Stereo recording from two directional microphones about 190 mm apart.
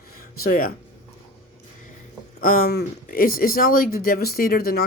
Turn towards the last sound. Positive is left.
turn(degrees=55)  # may be behind; listen again after turning